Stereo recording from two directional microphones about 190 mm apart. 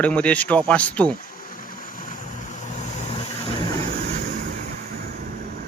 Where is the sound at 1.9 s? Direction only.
45° left (ahead or behind).